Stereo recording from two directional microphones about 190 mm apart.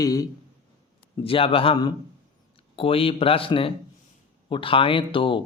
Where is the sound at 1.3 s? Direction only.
30° left (ahead or behind).